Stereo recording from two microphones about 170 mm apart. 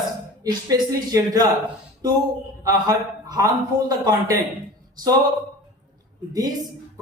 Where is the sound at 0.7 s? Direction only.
20° right (ahead or behind).